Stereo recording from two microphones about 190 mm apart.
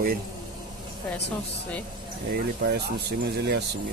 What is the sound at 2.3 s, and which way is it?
Speech, 55° right (ahead or behind).